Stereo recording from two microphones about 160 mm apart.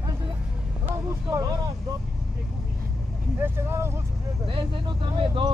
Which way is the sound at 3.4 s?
15° right (ahead or behind).